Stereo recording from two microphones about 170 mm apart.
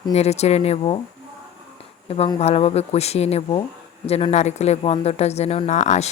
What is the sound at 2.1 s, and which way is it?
A woman's voice, 35° left (ahead or behind).